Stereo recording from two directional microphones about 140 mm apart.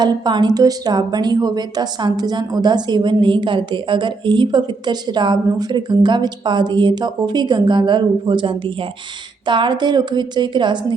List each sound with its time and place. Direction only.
0.0 s a woman's voice: 30° right (ahead or behind)